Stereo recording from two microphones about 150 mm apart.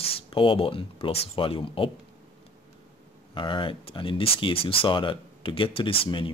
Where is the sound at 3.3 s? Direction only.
35° left (ahead or behind).